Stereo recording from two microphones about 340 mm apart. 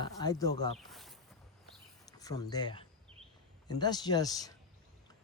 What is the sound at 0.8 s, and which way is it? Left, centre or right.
Speech, centre.